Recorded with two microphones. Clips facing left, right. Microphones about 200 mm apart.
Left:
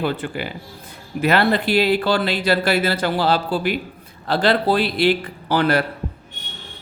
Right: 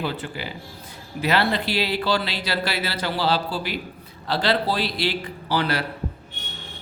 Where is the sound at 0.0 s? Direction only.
55° left (ahead or behind).